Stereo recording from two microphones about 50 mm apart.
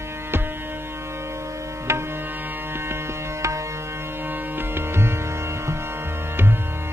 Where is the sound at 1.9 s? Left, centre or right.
Right.